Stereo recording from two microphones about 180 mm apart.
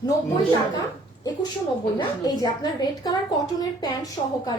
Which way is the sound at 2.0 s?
20° left (ahead or behind).